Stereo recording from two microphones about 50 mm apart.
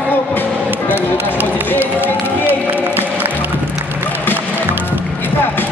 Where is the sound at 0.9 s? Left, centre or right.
Right.